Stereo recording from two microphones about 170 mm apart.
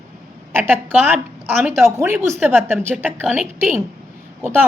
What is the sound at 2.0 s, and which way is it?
A woman's voice, 15° right (ahead or behind).